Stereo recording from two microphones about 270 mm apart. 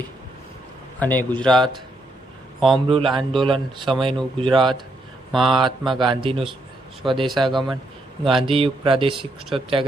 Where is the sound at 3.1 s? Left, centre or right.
Centre.